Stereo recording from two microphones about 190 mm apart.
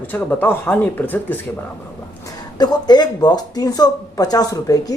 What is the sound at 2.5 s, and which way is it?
A woman's voice, 20° left (ahead or behind).